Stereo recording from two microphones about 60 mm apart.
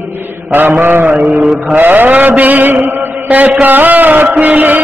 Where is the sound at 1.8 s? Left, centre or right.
Right.